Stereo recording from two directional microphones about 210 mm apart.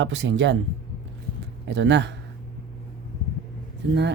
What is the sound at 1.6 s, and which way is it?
Speech, 55° right (ahead or behind).